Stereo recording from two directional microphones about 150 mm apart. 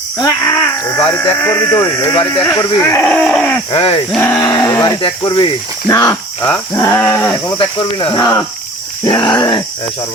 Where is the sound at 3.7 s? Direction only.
35° left (ahead or behind).